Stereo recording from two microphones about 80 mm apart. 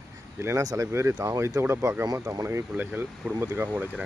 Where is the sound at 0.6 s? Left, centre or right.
Right.